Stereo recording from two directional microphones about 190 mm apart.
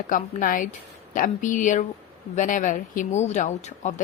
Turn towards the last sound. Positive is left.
turn(degrees=40)  # may be behind; listen again after turning